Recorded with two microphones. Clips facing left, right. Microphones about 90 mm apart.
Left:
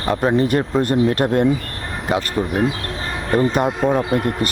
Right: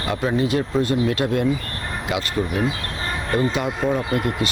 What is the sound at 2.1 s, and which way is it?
Speech, 40° left (ahead or behind).